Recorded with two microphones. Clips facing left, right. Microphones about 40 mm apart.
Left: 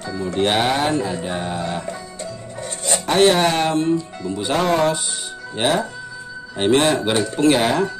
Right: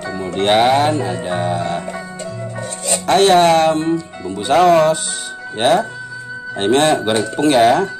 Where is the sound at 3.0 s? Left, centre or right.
Centre.